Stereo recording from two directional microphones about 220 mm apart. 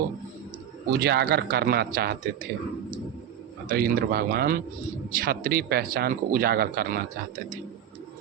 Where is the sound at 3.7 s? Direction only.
45° right (ahead or behind).